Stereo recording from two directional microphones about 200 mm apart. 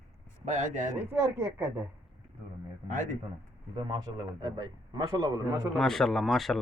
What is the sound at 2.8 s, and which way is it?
Speech, 40° right (ahead or behind).